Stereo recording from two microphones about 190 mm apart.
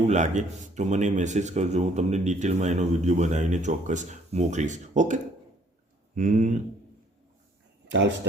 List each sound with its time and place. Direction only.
0.1 s speech: 40° right (ahead or behind)
7.9 s speech: 70° right (ahead or behind)